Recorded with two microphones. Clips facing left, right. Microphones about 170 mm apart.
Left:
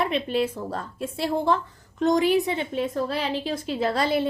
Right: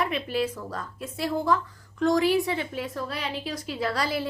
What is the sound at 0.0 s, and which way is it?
A woman's voice, 25° left (ahead or behind).